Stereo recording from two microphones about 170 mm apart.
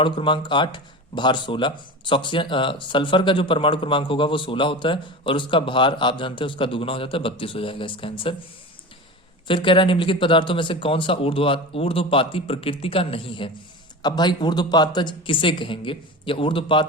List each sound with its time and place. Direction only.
0.0 s speech: 30° left (ahead or behind)
9.5 s speech: 30° left (ahead or behind)